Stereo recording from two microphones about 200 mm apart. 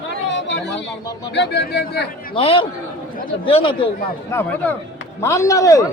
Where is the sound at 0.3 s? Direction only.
65° left (ahead or behind).